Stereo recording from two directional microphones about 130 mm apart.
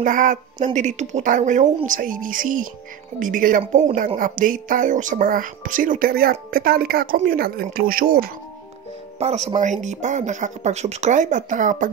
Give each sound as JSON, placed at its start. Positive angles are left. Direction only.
{"t": 0.0, "sound": "a woman's voice", "side_deg": -90}
{"t": 0.7, "sound": "speech", "side_deg": -65}
{"t": 1.9, "sound": "a woman's voice", "side_deg": -90}
{"t": 4.2, "sound": "a woman's voice", "side_deg": -90}
{"t": 9.2, "sound": "speech", "side_deg": -55}